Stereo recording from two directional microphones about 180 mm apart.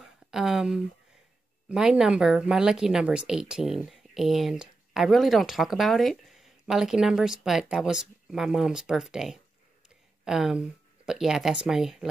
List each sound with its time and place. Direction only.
0.3 s speech: 5° right (ahead or behind)